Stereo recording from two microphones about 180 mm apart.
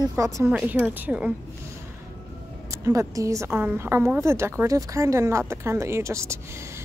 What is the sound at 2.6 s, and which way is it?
A woman's voice, 15° right (ahead or behind).